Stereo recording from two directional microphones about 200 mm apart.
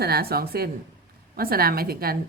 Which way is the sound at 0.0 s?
50° right (ahead or behind).